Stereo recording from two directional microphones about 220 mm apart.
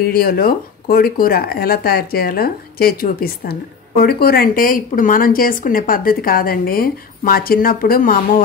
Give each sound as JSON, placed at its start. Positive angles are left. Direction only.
{"t": 0.0, "sound": "speech", "side_deg": 45}